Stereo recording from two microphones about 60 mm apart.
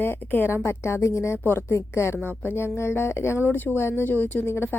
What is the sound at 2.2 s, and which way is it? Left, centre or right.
A woman's voice, left.